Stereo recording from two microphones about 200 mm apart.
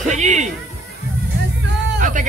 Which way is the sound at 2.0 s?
40° right (ahead or behind).